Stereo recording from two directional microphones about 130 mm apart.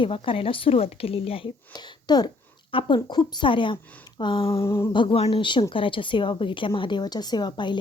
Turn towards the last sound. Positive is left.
turn(degrees=35)  # may be behind; listen again after turning